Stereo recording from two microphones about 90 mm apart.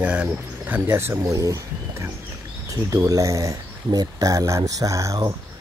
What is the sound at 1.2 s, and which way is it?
Speech, 40° right (ahead or behind).